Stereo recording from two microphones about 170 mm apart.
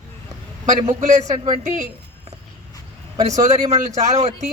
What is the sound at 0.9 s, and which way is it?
Speech, 45° right (ahead or behind).